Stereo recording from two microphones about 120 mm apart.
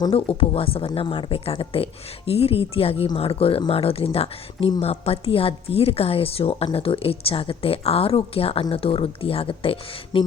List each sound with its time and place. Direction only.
0.1 s a woman's voice: 50° left (ahead or behind)